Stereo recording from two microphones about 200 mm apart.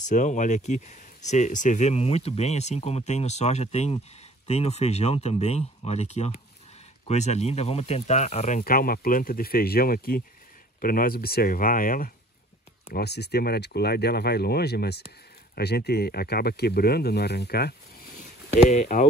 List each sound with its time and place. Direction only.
0.0 s speech: 40° left (ahead or behind)
18.5 s speech: 35° left (ahead or behind)